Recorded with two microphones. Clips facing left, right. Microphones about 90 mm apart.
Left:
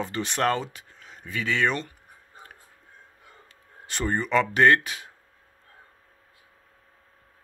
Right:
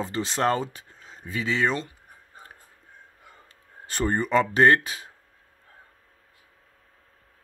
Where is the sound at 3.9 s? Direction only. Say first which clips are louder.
Right 2 dB; 40° right (ahead or behind).